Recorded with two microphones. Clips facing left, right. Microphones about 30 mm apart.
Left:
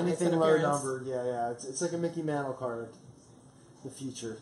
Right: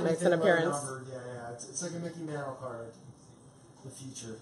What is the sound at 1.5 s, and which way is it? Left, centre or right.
Speech, left.